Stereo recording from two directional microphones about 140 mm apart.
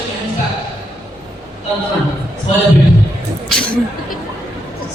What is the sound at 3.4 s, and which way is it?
Speech, 5° left (ahead or behind).